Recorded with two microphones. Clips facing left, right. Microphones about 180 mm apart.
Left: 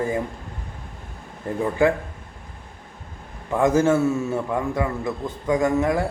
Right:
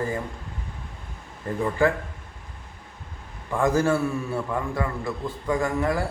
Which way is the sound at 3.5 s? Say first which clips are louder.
Left 3 dB; 20° left (ahead or behind).